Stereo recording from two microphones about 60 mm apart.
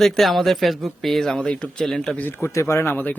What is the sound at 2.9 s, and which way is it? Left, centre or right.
Speech, left.